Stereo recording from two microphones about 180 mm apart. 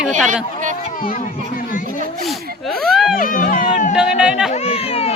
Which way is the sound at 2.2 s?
Centre (ahead or behind).